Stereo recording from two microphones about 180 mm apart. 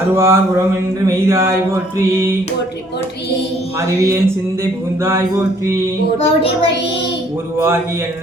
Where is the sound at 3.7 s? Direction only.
15° right (ahead or behind).